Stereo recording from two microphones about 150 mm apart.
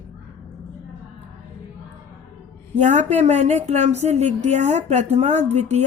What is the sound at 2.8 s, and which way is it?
A woman's voice, 50° right (ahead or behind).